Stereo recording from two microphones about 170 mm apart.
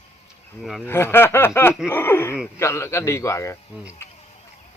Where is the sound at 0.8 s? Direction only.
15° left (ahead or behind).